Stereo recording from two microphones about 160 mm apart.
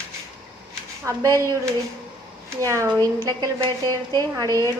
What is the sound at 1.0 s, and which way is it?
Speech, 20° right (ahead or behind).